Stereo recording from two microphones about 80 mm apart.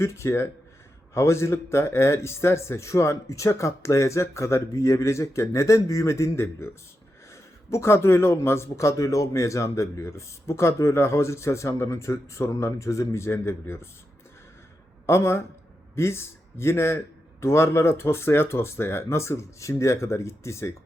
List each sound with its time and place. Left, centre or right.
0.0 s speech: left
7.7 s speech: left
15.0 s speech: left